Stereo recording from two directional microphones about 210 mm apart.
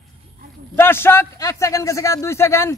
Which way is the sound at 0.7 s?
10° left (ahead or behind).